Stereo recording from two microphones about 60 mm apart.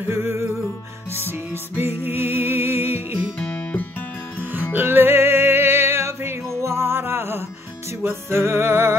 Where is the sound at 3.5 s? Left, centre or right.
Centre.